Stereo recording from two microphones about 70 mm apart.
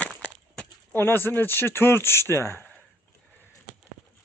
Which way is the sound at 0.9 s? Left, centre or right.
Left.